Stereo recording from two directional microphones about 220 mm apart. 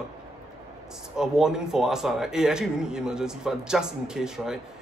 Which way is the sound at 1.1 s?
Centre (ahead or behind).